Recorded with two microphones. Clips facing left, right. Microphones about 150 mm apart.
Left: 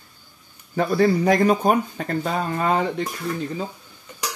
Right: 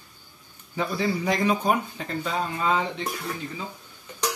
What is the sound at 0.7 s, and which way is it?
Speech, 50° left (ahead or behind).